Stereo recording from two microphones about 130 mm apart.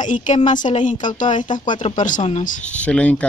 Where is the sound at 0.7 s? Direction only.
50° left (ahead or behind).